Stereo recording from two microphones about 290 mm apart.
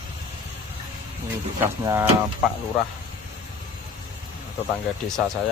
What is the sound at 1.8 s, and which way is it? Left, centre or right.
Speech, centre.